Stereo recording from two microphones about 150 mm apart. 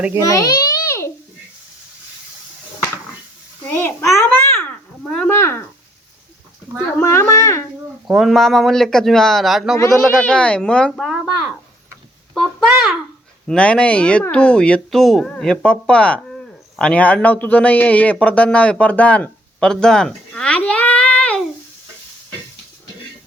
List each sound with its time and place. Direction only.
0.2 s babbling: 20° left (ahead or behind)
3.8 s a child's voice: 15° left (ahead or behind)
5.4 s speech: 15° left (ahead or behind)
6.9 s a child's voice: 15° left (ahead or behind)
8.0 s a man's voice: 5° right (ahead or behind)